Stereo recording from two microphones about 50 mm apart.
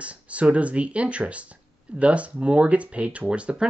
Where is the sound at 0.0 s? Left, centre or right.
Right.